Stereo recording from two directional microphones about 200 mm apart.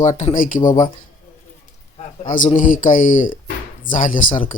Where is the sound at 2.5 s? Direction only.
40° left (ahead or behind).